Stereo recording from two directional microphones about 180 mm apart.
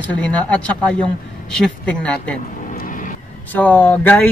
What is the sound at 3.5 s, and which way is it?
Speech, 10° left (ahead or behind).